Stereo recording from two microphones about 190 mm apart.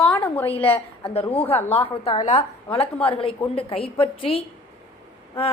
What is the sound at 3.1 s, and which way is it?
A woman's voice, 30° left (ahead or behind).